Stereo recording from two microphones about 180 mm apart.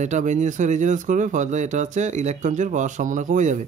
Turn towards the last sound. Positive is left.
turn(degrees=-45)  # may be behind; listen again after turning